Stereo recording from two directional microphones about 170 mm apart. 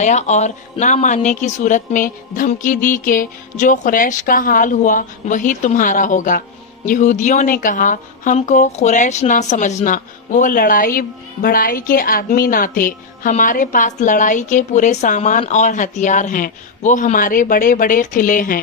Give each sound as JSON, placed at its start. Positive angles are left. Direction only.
{"t": 0.0, "sound": "speech", "side_deg": 45}